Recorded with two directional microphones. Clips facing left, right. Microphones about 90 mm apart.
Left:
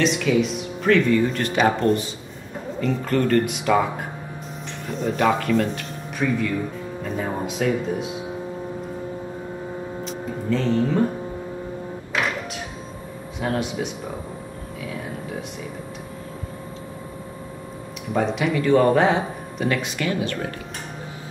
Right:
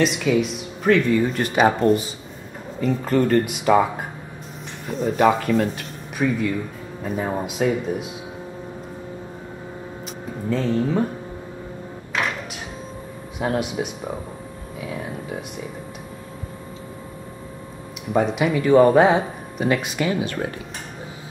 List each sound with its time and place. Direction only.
0.0 s speech: 5° right (ahead or behind)
5.0 s speech: 5° right (ahead or behind)
10.5 s speech: 5° right (ahead or behind)
13.4 s speech: 10° right (ahead or behind)
18.1 s speech: 10° right (ahead or behind)